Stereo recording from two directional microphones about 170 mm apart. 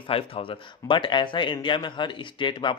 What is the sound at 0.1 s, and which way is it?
Speech, 30° left (ahead or behind).